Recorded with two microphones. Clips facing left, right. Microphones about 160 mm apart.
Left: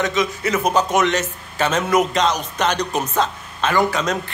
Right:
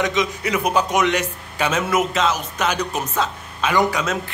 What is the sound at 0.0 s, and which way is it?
A man's voice, 15° right (ahead or behind).